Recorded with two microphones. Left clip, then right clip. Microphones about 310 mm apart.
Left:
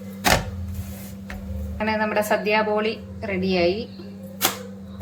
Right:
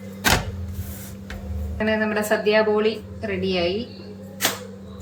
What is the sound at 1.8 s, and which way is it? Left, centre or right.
A woman's voice, centre.